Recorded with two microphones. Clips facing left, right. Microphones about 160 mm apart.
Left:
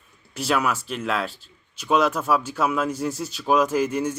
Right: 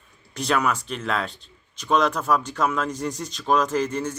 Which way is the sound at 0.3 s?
5° left (ahead or behind).